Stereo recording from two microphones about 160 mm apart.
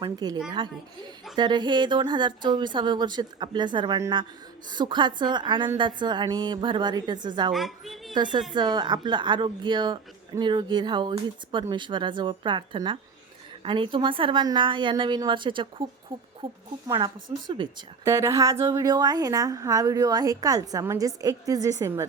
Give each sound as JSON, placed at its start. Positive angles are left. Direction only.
{"t": 0.0, "sound": "a woman's voice", "side_deg": -25}
{"t": 7.5, "sound": "a woman's voice", "side_deg": 0}
{"t": 8.1, "sound": "a woman's voice", "side_deg": -30}
{"t": 18.0, "sound": "speech", "side_deg": -15}